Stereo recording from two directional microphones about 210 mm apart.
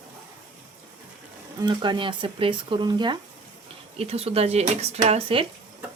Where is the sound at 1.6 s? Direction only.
20° right (ahead or behind).